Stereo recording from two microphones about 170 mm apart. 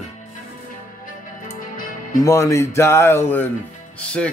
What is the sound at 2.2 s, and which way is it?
Speech, 15° left (ahead or behind).